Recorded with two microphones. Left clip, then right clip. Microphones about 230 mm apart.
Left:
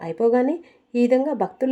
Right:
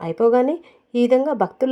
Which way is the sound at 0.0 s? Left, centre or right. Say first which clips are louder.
Right 3 dB; right.